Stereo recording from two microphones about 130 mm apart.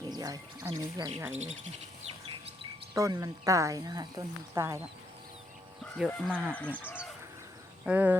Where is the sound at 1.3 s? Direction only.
60° right (ahead or behind).